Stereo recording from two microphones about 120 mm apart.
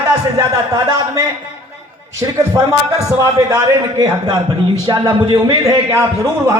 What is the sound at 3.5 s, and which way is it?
A man's voice, 35° right (ahead or behind).